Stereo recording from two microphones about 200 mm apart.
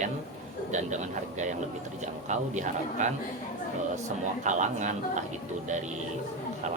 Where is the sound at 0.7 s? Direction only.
35° right (ahead or behind).